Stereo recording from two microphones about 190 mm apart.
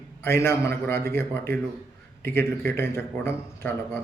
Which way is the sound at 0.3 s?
15° left (ahead or behind).